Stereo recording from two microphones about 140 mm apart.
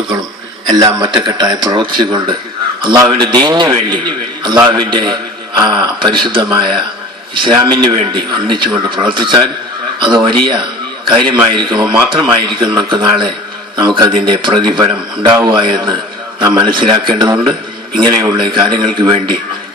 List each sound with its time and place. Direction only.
0.7 s speech: 30° right (ahead or behind)
15.2 s a man's voice: 25° right (ahead or behind)
15.4 s speech: 35° right (ahead or behind)